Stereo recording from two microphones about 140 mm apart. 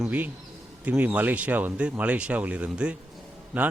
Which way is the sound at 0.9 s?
10° right (ahead or behind).